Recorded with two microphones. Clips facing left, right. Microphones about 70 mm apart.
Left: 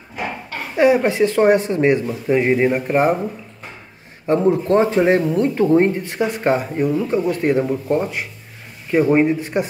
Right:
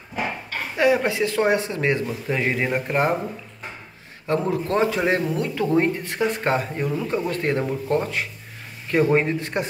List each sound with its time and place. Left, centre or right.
0.7 s speech: left
2.3 s speech: centre
4.3 s speech: left
6.1 s speech: centre